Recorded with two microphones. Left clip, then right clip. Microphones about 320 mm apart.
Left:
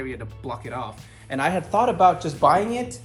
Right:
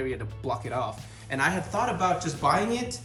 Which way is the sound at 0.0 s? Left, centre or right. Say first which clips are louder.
Right 1 dB; centre.